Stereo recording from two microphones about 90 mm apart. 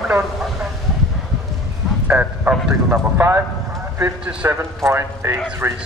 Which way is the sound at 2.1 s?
15° right (ahead or behind).